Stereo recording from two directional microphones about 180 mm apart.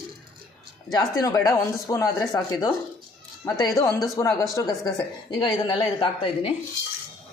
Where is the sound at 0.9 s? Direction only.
20° left (ahead or behind).